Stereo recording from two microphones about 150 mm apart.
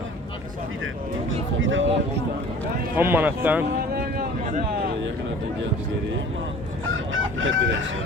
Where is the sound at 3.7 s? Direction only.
85° right.